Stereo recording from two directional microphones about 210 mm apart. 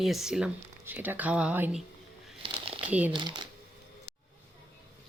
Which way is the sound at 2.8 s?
5° right (ahead or behind).